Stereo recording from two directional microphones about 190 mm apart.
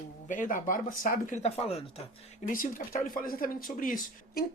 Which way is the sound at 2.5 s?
45° left (ahead or behind).